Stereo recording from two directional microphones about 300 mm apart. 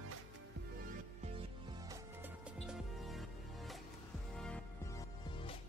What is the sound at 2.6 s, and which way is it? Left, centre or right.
Music, centre.